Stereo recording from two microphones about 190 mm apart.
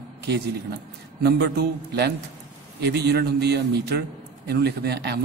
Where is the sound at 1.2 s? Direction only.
60° right (ahead or behind).